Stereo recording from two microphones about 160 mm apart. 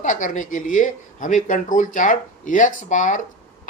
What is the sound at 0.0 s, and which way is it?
Speech, 50° left (ahead or behind).